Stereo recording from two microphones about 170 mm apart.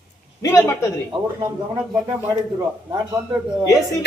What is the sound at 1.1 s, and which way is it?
Speech, 20° right (ahead or behind).